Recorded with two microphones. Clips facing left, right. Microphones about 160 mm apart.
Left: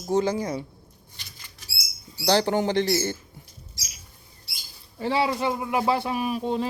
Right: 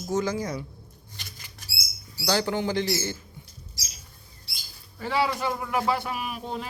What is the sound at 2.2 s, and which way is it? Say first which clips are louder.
Speech: left 4 dB; 25° left (ahead or behind).